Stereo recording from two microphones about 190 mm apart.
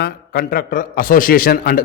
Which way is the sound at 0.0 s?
50° left (ahead or behind).